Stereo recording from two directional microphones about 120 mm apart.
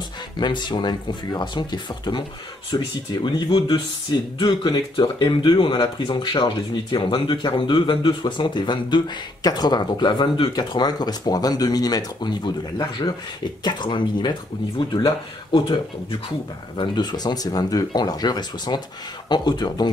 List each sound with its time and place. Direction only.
0.4 s speech: 40° left (ahead or behind)
15.5 s speech: 45° left (ahead or behind)